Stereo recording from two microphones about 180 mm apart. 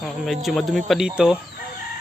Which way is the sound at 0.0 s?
Centre (ahead or behind).